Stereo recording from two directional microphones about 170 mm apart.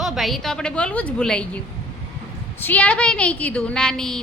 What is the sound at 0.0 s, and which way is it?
A woman's voice, centre (ahead or behind).